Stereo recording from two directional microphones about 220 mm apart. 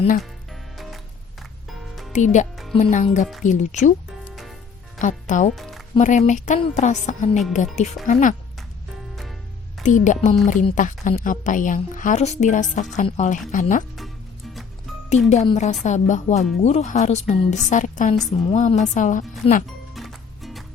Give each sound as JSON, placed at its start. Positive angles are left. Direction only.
{"t": 0.2, "sound": "music", "side_deg": 0}
{"t": 2.1, "sound": "a woman's voice", "side_deg": 35}
{"t": 4.9, "sound": "speech", "side_deg": 35}
{"t": 5.5, "sound": "music", "side_deg": 0}
{"t": 6.0, "sound": "a woman's voice", "side_deg": 35}
{"t": 9.8, "sound": "a woman's voice", "side_deg": 35}
{"t": 13.9, "sound": "music", "side_deg": 0}
{"t": 15.3, "sound": "a woman's voice", "side_deg": 30}
{"t": 19.9, "sound": "music", "side_deg": 0}